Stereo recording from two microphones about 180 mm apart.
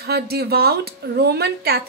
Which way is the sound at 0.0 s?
60° right (ahead or behind).